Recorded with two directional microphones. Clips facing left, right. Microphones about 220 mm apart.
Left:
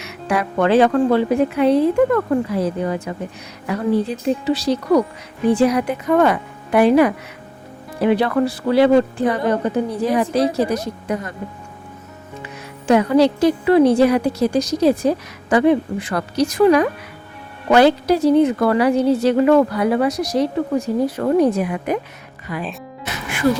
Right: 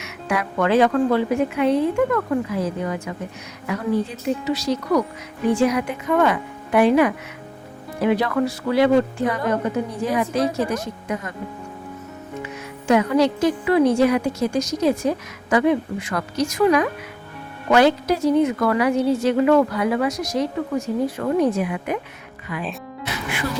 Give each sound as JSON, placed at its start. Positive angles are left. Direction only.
{"t": 0.0, "sound": "a woman's voice", "side_deg": 35}
{"t": 12.9, "sound": "a woman's voice", "side_deg": 35}